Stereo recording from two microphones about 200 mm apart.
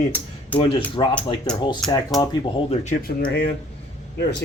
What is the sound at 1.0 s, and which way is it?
Speech, 20° left (ahead or behind).